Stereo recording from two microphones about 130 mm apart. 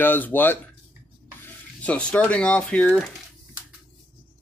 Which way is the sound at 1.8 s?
10° left (ahead or behind).